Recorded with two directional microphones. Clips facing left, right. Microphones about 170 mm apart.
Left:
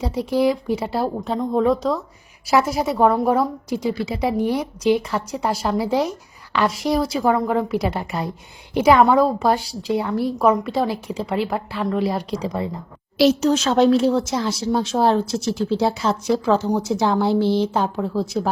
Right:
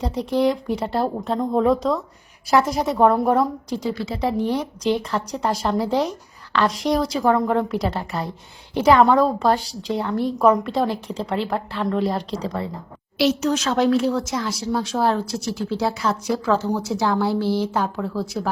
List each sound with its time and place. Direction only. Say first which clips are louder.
0.0 s a woman's voice: left 1 dB; 5° left (ahead or behind)
13.1 s a woman's voice: left 4 dB; 35° left (ahead or behind)